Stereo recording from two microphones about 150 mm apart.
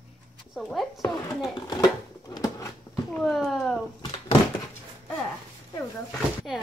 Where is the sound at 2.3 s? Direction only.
25° left (ahead or behind).